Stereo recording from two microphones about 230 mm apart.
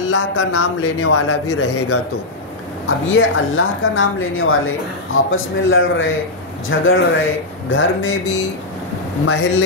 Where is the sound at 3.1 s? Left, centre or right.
Left.